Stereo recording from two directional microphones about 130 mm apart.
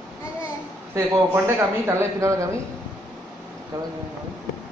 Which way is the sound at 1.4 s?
20° right (ahead or behind).